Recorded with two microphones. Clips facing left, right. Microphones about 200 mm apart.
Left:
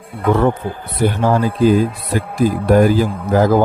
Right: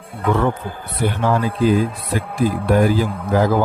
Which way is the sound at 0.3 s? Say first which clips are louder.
Left 4 dB; 40° left (ahead or behind).